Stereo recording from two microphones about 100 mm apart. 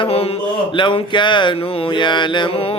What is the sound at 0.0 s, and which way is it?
Speech, 75° left (ahead or behind).